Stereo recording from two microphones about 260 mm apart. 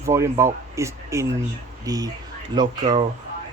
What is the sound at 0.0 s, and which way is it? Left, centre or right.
Speech, centre.